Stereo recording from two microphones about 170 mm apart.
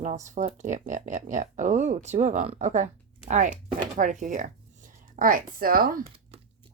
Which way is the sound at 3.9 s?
45° right (ahead or behind).